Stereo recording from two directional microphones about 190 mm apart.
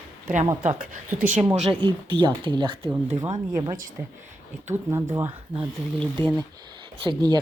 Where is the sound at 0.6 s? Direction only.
45° right (ahead or behind).